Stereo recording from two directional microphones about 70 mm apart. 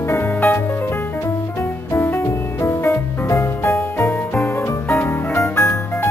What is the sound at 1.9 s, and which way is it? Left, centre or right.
Music, left.